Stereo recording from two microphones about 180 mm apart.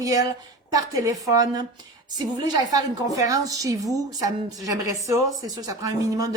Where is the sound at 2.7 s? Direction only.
20° right (ahead or behind).